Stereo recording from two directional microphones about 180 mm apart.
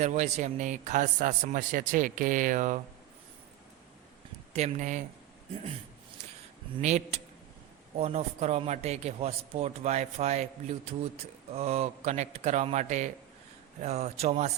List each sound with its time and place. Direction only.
0.0 s a man's voice: 40° right (ahead or behind)
4.5 s a man's voice: 40° right (ahead or behind)
6.7 s a man's voice: 40° right (ahead or behind)